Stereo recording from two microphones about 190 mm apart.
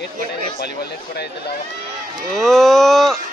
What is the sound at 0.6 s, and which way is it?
Speech, 55° left (ahead or behind).